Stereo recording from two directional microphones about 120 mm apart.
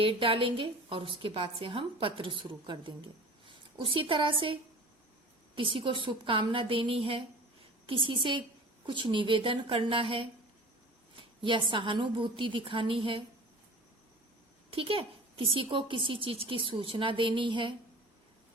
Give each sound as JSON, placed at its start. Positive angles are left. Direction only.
{"t": 0.0, "sound": "a woman's voice", "side_deg": -45}
{"t": 5.5, "sound": "a woman's voice", "side_deg": -45}
{"t": 14.7, "sound": "a woman's voice", "side_deg": -50}